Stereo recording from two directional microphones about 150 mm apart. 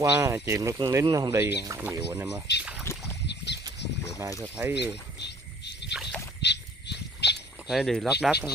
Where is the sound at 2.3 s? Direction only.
5° right (ahead or behind).